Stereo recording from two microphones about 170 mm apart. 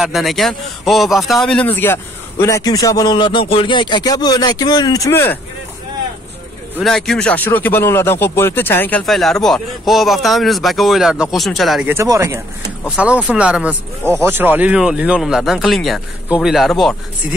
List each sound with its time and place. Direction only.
0.0 s a man's voice: centre (ahead or behind)
6.8 s speech: centre (ahead or behind)
11.9 s speech: 15° right (ahead or behind)
12.8 s speech: 5° right (ahead or behind)